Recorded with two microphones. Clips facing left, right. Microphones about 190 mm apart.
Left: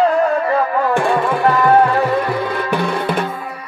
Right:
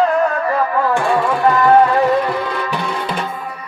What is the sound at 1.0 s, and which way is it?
Music, 55° left (ahead or behind).